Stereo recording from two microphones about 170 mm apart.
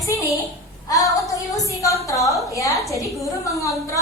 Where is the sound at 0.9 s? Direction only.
20° left (ahead or behind).